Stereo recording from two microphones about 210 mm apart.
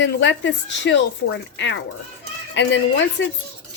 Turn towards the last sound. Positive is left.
turn(degrees=60)  # may be behind; listen again after turning